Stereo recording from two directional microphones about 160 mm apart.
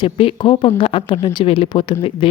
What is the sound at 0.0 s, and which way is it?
Speech, 35° left (ahead or behind).